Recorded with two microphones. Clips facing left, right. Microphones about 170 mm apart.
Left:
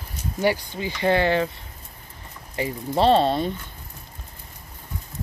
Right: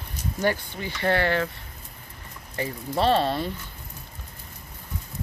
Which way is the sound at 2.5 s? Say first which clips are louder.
Left 3 dB; 15° left (ahead or behind).